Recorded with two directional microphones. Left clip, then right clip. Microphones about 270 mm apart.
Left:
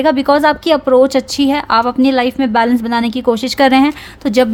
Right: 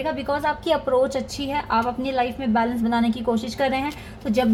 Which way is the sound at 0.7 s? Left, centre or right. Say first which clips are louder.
Left 9 dB; left.